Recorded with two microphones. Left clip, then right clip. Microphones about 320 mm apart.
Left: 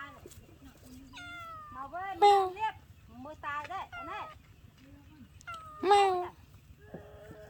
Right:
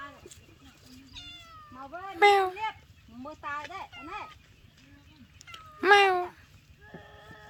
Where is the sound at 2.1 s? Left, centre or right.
Centre.